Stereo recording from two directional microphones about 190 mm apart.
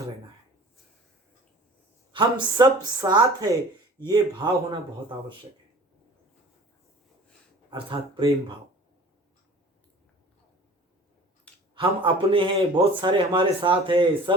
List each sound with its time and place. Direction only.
2.1 s a man's voice: 25° right (ahead or behind)
7.7 s a man's voice: 25° right (ahead or behind)
11.7 s a man's voice: 25° right (ahead or behind)